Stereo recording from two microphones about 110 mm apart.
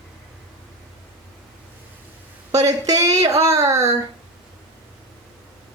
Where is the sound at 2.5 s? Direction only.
30° right (ahead or behind).